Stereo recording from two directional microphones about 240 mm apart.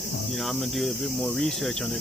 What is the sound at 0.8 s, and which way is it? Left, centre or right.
Cricket, centre.